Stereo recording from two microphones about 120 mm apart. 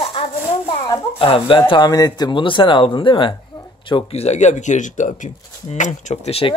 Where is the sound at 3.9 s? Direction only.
60° left (ahead or behind).